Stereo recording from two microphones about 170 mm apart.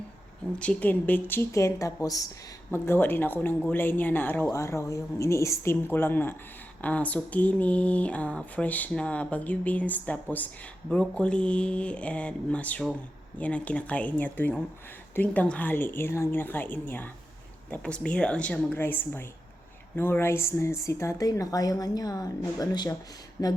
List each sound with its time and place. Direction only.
0.6 s speech: 10° left (ahead or behind)